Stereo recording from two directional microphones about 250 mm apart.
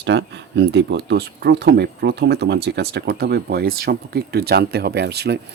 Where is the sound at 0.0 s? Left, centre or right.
Right.